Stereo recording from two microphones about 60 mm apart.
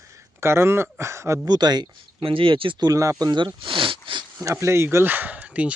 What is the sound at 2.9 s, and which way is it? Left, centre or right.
Speech, right.